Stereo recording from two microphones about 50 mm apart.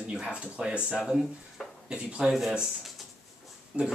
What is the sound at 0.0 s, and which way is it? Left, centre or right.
Speech, centre.